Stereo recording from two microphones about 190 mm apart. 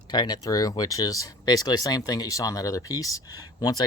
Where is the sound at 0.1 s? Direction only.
20° left (ahead or behind).